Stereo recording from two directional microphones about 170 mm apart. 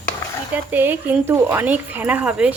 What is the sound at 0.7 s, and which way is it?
Speech, 10° right (ahead or behind).